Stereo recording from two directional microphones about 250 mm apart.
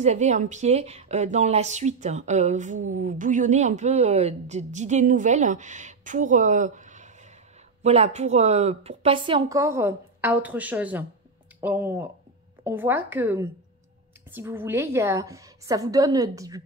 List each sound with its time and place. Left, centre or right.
0.0 s a woman's voice: right